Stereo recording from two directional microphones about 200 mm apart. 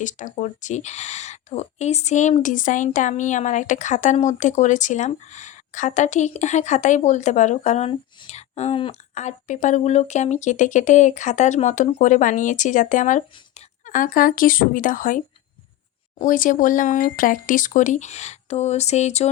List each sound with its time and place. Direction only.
0.0 s speech: 40° left (ahead or behind)